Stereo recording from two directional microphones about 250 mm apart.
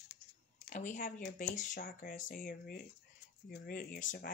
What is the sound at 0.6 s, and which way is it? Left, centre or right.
Speech, left.